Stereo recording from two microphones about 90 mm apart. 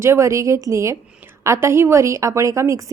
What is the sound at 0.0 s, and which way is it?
A woman's voice, 30° right (ahead or behind).